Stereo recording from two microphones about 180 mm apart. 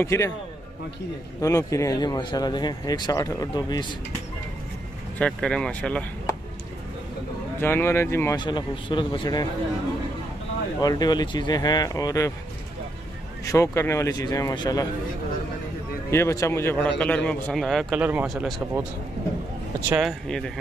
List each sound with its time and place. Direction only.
0.0 s speech: 15° left (ahead or behind)
1.4 s speech: 15° left (ahead or behind)
5.2 s speech: 5° left (ahead or behind)
7.6 s speech: 15° left (ahead or behind)
8.4 s speech: 25° left (ahead or behind)
10.8 s speech: 20° left (ahead or behind)
13.5 s speech: 15° left (ahead or behind)
16.1 s a man's voice: 15° left (ahead or behind); by 18.9 s 5° right (ahead or behind)
19.9 s a man's voice: centre (ahead or behind)